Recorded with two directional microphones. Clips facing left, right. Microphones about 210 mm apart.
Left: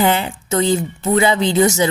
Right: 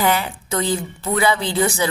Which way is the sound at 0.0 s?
25° left (ahead or behind).